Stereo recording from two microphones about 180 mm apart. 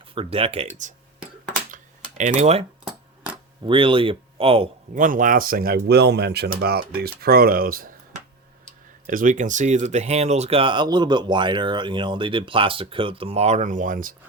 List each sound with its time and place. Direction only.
0.1 s speech: 30° right (ahead or behind)
1.7 s computer keyboard: 45° right (ahead or behind)
3.7 s speech: 30° right (ahead or behind)
4.9 s speech: 50° right (ahead or behind)
9.0 s speech: 45° right (ahead or behind)